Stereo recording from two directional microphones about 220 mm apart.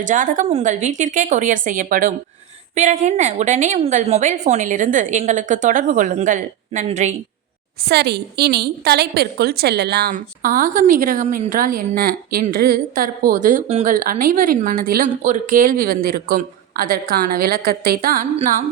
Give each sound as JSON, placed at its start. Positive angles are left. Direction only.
{"t": 0.0, "sound": "a woman's voice", "side_deg": -35}
{"t": 7.9, "sound": "a woman's voice", "side_deg": -50}